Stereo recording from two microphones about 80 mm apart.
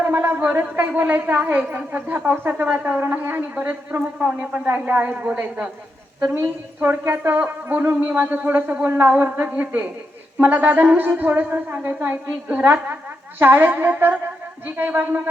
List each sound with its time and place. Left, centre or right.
0.0 s a woman's voice: right
6.2 s a woman's voice: right